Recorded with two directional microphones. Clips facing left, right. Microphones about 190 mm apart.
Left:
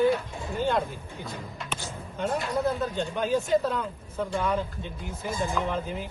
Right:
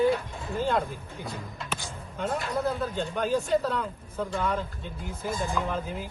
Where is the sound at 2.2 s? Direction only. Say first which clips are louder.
Left 2 dB; centre (ahead or behind).